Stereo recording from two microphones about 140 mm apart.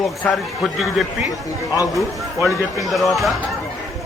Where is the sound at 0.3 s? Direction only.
Centre (ahead or behind).